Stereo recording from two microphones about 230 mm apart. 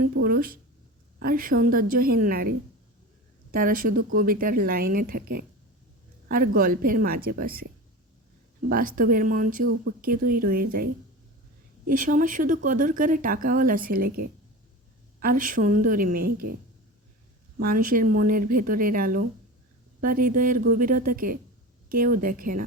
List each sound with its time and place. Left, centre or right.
0.0 s speech: right
3.5 s speech: right
8.7 s speech: right
11.9 s speech: right
17.6 s speech: right